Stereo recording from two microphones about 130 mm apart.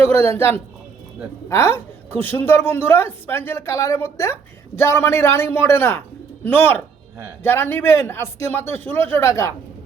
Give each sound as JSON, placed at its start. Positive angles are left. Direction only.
{"t": 0.3, "sound": "a woman's voice", "side_deg": 20}